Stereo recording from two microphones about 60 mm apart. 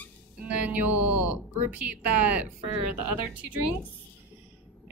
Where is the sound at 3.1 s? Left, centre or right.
Right.